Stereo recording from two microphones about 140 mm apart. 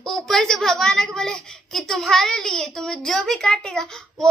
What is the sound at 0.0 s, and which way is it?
A woman's voice, centre (ahead or behind).